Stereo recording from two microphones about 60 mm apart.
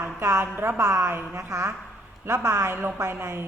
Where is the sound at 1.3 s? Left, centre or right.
Right.